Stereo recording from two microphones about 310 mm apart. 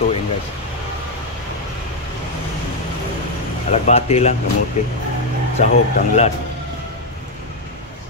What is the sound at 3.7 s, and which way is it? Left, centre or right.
Speech, left.